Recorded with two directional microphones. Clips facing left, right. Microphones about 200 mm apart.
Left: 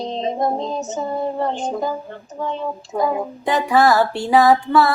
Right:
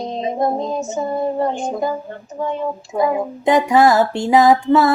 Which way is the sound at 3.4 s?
15° right (ahead or behind).